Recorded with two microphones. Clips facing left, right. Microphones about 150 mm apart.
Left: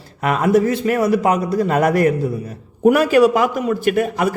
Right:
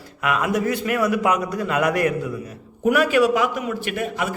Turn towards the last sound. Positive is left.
turn(degrees=45)  # may be behind; listen again after turning